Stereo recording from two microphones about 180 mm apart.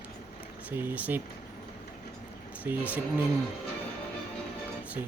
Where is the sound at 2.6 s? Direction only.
10° right (ahead or behind).